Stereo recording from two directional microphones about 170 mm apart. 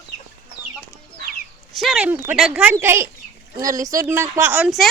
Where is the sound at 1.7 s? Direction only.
Centre (ahead or behind).